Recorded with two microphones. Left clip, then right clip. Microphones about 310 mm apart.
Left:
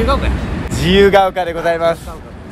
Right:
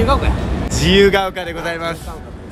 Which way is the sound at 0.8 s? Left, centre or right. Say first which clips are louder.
Left 3 dB; centre.